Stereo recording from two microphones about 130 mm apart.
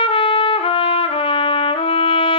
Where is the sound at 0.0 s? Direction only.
40° left (ahead or behind).